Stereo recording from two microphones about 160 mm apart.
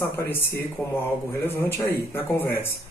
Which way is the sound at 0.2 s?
15° left (ahead or behind).